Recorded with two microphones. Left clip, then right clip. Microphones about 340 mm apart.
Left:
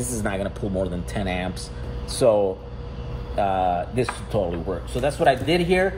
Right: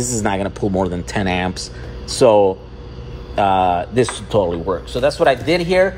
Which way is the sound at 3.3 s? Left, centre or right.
Right.